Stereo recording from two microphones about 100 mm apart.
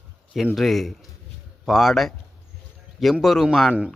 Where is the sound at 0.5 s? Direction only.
Centre (ahead or behind).